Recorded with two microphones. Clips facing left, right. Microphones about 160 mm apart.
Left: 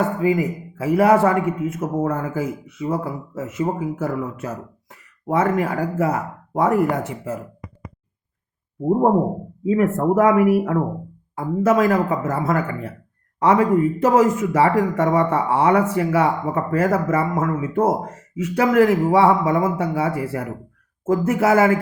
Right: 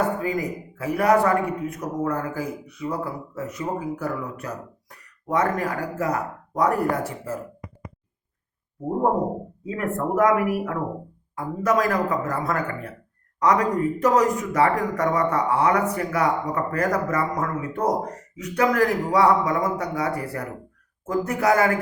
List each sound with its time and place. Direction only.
0.2 s speech: 20° left (ahead or behind)
9.6 s speech: 25° left (ahead or behind)